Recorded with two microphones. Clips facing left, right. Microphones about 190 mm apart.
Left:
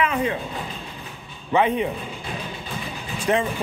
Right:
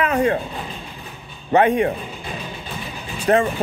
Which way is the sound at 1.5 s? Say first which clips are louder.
Right 4 dB; 70° right (ahead or behind).